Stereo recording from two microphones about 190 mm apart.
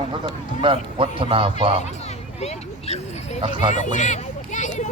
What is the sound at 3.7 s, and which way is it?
Speech, 40° left (ahead or behind).